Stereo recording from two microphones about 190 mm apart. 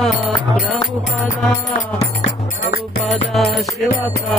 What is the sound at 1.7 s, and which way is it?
Music, 40° left (ahead or behind).